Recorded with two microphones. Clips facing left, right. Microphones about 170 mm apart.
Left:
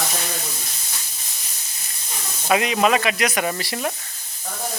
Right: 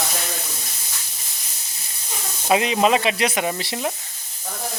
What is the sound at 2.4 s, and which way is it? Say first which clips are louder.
Speech: right 1 dB; 25° right (ahead or behind).